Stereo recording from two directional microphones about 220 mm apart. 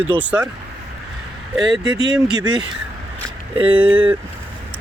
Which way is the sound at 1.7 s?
20° right (ahead or behind).